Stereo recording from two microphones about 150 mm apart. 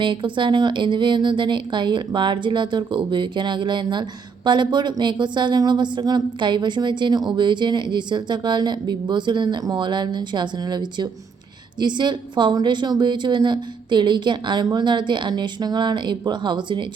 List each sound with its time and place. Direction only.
0.0 s speech: 35° right (ahead or behind)